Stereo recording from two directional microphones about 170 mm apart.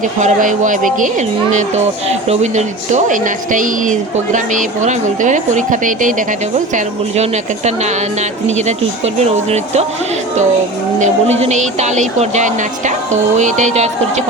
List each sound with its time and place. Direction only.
0.2 s speech: 45° right (ahead or behind)
11.0 s speech: 40° right (ahead or behind)